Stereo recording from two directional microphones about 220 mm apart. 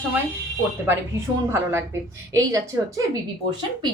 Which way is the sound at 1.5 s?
10° right (ahead or behind).